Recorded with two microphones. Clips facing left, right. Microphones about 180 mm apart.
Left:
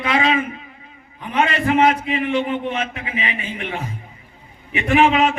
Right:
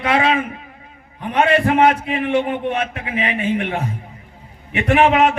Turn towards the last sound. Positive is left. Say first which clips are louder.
# right 1 dB
turn(degrees=-60)  # may be behind; listen again after turning